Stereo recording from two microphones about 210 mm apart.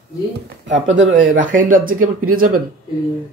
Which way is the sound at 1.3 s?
40° right (ahead or behind).